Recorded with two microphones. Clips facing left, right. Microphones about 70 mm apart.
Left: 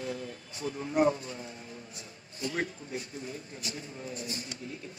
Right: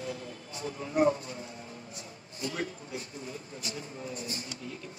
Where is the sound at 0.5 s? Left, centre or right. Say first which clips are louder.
Even; right.